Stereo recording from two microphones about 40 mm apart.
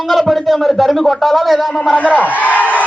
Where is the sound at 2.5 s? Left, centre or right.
Left.